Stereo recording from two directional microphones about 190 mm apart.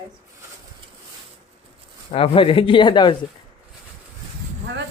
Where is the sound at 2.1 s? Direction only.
30° left (ahead or behind).